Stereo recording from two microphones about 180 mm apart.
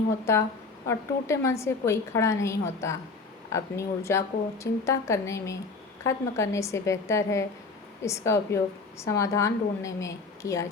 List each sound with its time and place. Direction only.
0.9 s a woman's voice: 15° left (ahead or behind)